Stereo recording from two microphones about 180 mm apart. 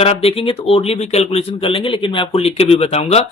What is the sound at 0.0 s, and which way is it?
Speech, 35° left (ahead or behind).